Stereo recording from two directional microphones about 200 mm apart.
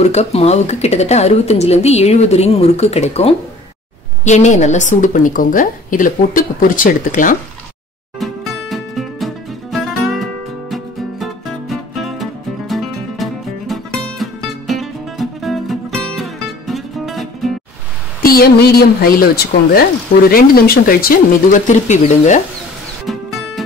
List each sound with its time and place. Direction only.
0.0 s speech: 35° left (ahead or behind)
8.2 s music: centre (ahead or behind)
18.2 s speech: 50° left (ahead or behind)
23.0 s music: centre (ahead or behind)